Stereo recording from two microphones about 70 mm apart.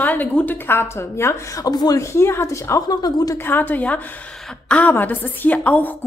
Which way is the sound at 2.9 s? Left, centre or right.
Left.